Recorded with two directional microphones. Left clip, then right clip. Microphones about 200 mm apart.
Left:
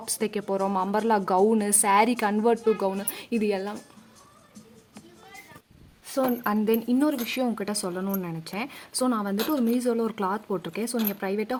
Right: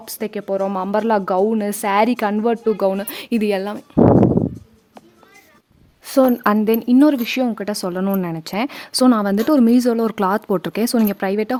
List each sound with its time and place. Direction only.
0.0 s speech: 25° right (ahead or behind); by 3.8 s 50° right (ahead or behind)
6.1 s speech: 40° right (ahead or behind)